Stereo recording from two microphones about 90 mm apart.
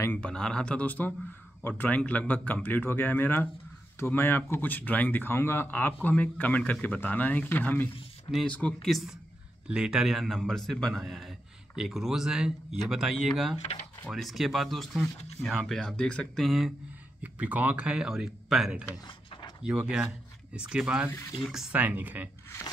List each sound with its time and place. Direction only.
0.2 s speech: 10° left (ahead or behind)
8.8 s speech: centre (ahead or behind)
16.4 s speech: centre (ahead or behind)
17.2 s speech: 15° right (ahead or behind)